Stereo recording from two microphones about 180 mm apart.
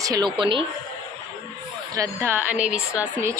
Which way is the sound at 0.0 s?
20° right (ahead or behind).